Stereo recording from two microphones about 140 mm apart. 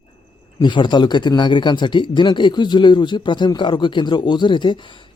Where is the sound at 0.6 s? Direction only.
35° left (ahead or behind).